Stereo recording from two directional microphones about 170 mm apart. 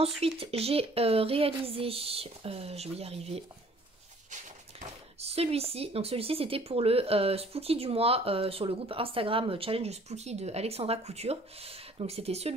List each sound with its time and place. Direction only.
0.2 s speech: 35° right (ahead or behind)